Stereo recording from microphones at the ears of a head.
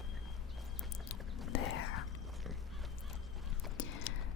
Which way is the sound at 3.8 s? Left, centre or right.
Left.